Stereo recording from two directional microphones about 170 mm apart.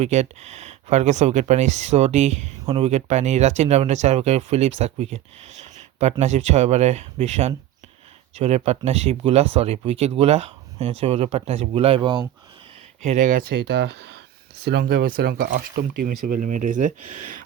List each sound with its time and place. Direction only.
0.0 s speech: 40° right (ahead or behind)
13.0 s speech: 45° right (ahead or behind)
13.6 s speech: 75° right (ahead or behind); by 17.2 s 50° right (ahead or behind)